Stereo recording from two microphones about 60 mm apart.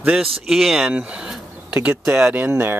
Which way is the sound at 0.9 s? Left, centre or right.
Centre.